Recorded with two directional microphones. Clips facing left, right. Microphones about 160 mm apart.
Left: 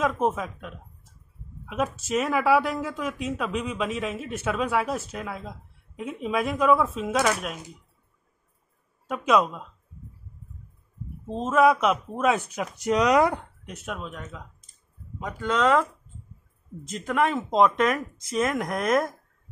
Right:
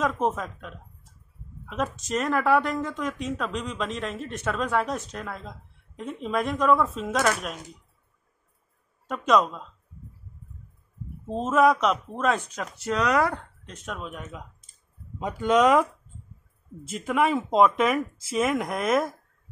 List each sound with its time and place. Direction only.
0.0 s speech: centre (ahead or behind)
9.0 s speech: 5° left (ahead or behind)
11.2 s speech: centre (ahead or behind)
15.1 s speech: 20° right (ahead or behind); by 19.1 s centre (ahead or behind)